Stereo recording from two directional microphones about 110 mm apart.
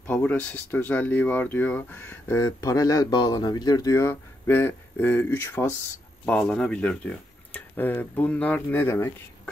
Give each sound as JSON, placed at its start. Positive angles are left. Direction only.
{"t": 0.0, "sound": "speech", "side_deg": 15}
{"t": 2.3, "sound": "speech", "side_deg": 30}
{"t": 6.2, "sound": "speech", "side_deg": 10}